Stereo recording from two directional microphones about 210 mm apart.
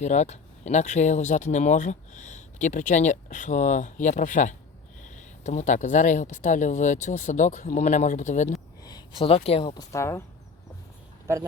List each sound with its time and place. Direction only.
0.0 s speech: 35° left (ahead or behind)
8.8 s speech: 20° left (ahead or behind)